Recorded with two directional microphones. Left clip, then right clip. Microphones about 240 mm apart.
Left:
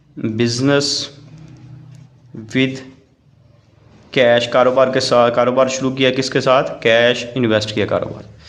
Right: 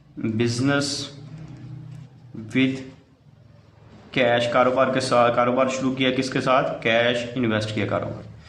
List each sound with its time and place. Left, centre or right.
0.2 s a man's voice: left
2.5 s a man's voice: left
4.1 s a man's voice: left